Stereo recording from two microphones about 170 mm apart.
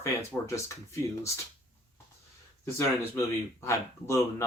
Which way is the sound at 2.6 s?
15° left (ahead or behind).